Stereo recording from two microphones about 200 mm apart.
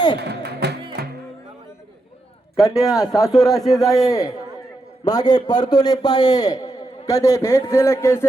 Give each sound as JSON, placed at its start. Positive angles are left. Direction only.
{"t": 0.2, "sound": "speech", "side_deg": -55}
{"t": 1.0, "sound": "music", "side_deg": -50}
{"t": 2.7, "sound": "speech", "side_deg": 0}
{"t": 3.0, "sound": "a man's voice", "side_deg": 15}